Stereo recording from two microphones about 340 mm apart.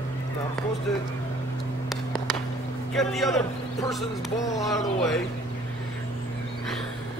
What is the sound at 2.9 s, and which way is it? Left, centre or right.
Speech, centre.